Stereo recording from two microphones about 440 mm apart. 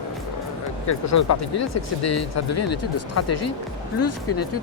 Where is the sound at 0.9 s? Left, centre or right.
Left.